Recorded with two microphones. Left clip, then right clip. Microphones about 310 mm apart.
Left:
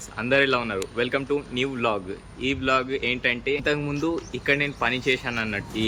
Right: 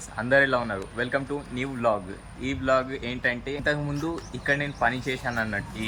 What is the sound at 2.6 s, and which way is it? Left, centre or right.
Speech, centre.